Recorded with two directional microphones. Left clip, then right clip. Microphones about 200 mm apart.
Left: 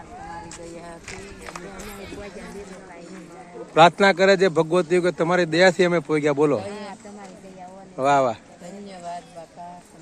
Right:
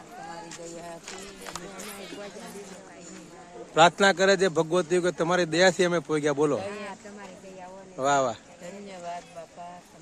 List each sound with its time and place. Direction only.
1.0 s speech: 30° right (ahead or behind)
3.8 s speech: centre (ahead or behind)
7.9 s speech: 10° left (ahead or behind)